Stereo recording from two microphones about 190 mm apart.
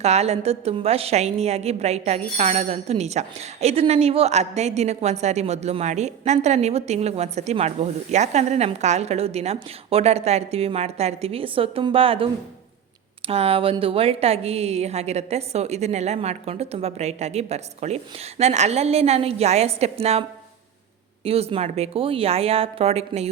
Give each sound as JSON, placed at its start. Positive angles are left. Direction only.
{"t": 0.0, "sound": "a woman's voice", "side_deg": -35}
{"t": 21.2, "sound": "a woman's voice", "side_deg": -30}